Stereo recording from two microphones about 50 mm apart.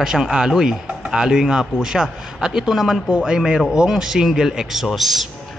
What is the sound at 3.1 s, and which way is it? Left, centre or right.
A man's voice, centre.